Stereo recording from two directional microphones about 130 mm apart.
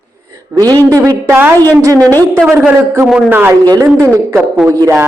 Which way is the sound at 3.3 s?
15° right (ahead or behind).